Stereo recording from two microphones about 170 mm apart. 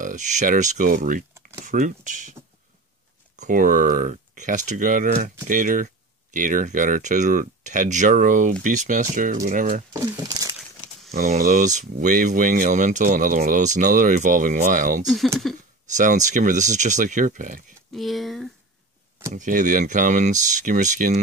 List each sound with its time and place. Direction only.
0.0 s speech: 45° right (ahead or behind)
3.3 s speech: 50° right (ahead or behind)
11.1 s speech: 45° right (ahead or behind)
15.4 s speech: centre (ahead or behind)
16.0 s speech: 45° right (ahead or behind)
17.9 s speech: centre (ahead or behind)
19.3 s speech: 50° right (ahead or behind)